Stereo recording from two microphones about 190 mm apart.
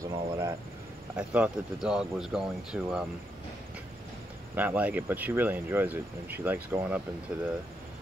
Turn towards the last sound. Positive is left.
turn(degrees=-10)  # may be behind; listen again after turning